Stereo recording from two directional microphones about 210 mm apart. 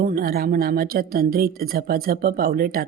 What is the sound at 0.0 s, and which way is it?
Speech, 45° right (ahead or behind).